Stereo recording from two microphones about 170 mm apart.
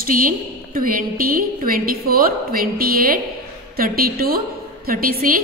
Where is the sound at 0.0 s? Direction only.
55° right (ahead or behind).